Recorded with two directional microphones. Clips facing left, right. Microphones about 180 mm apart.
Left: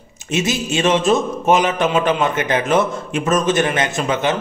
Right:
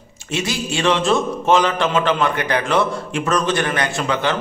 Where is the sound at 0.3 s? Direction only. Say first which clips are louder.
Left 3 dB; 20° left (ahead or behind).